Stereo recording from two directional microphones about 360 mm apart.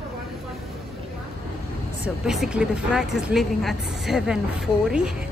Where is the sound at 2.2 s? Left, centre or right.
Centre.